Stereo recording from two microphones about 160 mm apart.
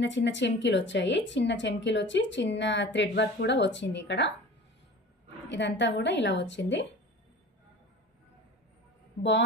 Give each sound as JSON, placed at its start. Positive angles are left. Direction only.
{"t": 0.0, "sound": "a woman's voice", "side_deg": 90}
{"t": 5.5, "sound": "a woman's voice", "side_deg": 90}